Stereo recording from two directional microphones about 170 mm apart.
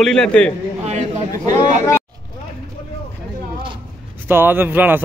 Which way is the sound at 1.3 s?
20° left (ahead or behind).